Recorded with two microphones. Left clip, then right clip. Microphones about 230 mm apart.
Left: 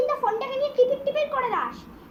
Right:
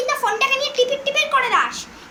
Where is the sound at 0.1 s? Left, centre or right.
Right.